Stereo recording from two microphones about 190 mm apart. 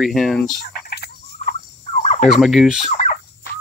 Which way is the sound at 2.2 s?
Centre (ahead or behind).